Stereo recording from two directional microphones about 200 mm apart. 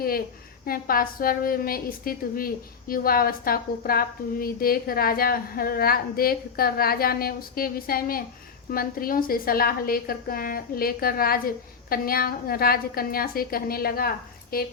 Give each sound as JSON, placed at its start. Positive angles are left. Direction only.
{"t": 0.0, "sound": "a woman's voice", "side_deg": 50}